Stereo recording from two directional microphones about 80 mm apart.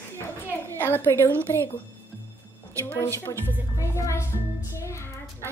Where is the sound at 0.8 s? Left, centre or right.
Left.